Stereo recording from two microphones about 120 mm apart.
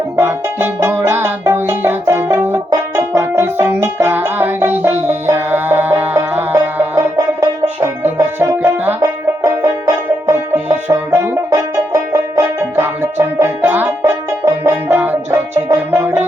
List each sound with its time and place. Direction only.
0.2 s music: 20° right (ahead or behind)
14.0 s banjo: 20° right (ahead or behind)
15.7 s music: 20° right (ahead or behind)